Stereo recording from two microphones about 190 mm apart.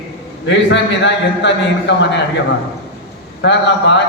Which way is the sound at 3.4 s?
65° left (ahead or behind).